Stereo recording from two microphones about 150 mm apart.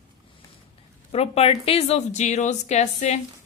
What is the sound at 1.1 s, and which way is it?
A woman's voice, 40° left (ahead or behind).